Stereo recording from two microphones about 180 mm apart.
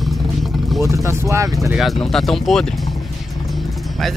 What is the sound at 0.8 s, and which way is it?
Speech, 15° right (ahead or behind).